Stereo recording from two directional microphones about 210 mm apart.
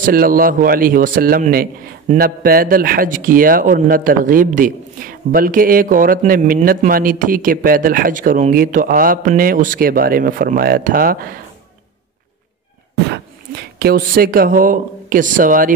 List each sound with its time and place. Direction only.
0.0 s a man's voice: 45° right (ahead or behind)
12.9 s speech: 50° right (ahead or behind)